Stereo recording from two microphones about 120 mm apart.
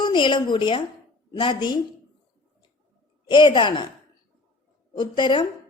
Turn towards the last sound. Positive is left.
turn(degrees=40)  # may be behind; listen again after turning